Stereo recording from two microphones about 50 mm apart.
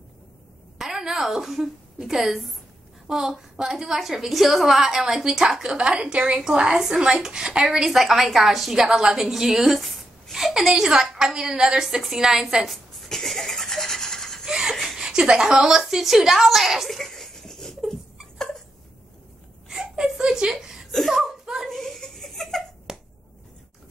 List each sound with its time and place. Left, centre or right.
0.7 s a woman's voice: centre
9.8 s a woman's voice: centre
12.6 s a sound: centre
14.5 s a sound: centre
15.0 s a woman's voice: centre
19.7 s whimper: centre
21.1 s a sound: centre
21.6 s giggle: centre
22.9 s finger snapping: centre